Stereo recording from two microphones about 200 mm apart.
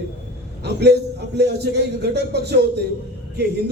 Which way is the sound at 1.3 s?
55° right (ahead or behind).